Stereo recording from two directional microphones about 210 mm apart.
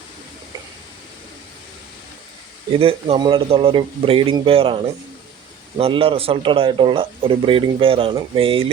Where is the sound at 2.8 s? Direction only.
25° right (ahead or behind).